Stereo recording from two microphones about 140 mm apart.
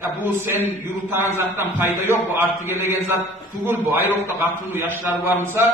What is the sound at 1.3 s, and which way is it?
Speech, 15° right (ahead or behind).